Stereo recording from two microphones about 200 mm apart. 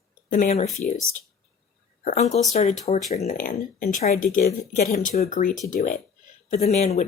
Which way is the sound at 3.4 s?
45° left (ahead or behind).